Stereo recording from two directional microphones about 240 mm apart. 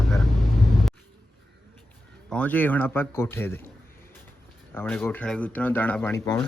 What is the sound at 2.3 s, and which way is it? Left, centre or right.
Speech, centre.